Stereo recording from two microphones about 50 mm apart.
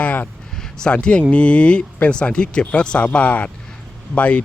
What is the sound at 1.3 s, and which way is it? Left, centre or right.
Speech, left.